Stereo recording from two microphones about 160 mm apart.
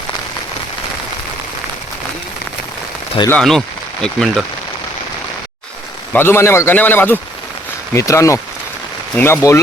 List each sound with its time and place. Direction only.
3.2 s speech: 5° left (ahead or behind)
6.1 s a man's voice: 15° left (ahead or behind)